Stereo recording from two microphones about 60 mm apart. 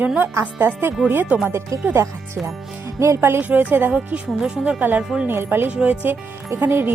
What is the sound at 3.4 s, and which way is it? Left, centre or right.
Speech, right.